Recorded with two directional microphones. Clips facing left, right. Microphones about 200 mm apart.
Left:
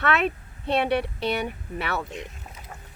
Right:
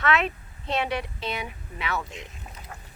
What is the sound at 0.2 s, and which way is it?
Speech, 55° left (ahead or behind).